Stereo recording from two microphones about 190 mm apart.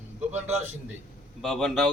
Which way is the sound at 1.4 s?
Centre (ahead or behind).